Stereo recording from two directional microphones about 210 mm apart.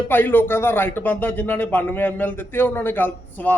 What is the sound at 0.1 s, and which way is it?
Speech, 10° left (ahead or behind).